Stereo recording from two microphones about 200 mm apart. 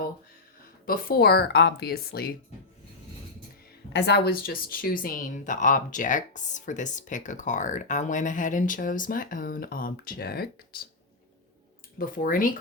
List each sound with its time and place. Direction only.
0.9 s speech: 50° left (ahead or behind)
3.9 s speech: 55° left (ahead or behind)
11.9 s speech: 45° left (ahead or behind)